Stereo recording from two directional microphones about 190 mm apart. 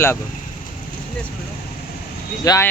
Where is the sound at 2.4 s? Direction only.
15° left (ahead or behind).